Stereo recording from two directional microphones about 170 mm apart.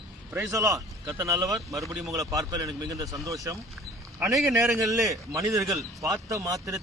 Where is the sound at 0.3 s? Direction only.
20° right (ahead or behind).